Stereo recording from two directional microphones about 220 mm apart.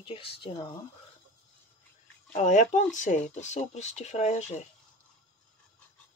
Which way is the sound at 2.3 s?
35° left (ahead or behind).